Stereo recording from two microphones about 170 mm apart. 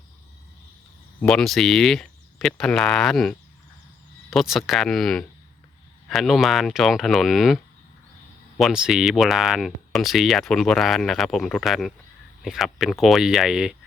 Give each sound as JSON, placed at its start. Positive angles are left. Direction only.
{"t": 1.2, "sound": "speech", "side_deg": 5}